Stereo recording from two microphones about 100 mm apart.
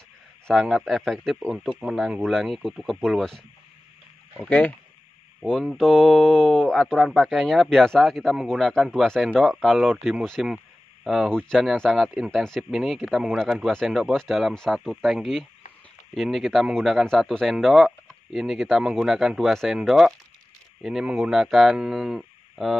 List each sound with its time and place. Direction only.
0.5 s speech: 5° left (ahead or behind)
4.4 s speech: 15° left (ahead or behind)
5.4 s speech: 5° left (ahead or behind)